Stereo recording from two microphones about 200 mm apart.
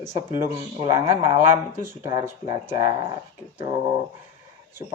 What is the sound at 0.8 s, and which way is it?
Speech, 20° right (ahead or behind).